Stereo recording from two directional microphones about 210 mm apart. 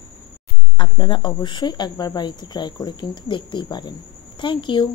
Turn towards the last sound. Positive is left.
turn(degrees=25)  # may be behind; listen again after turning